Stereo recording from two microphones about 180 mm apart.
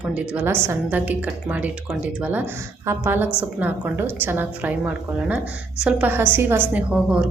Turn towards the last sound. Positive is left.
turn(degrees=-5)  # may be behind; listen again after turning